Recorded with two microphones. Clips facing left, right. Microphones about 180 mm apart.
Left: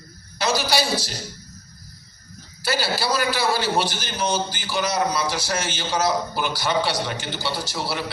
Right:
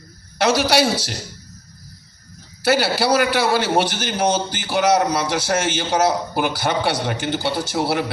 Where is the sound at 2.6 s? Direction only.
65° right (ahead or behind).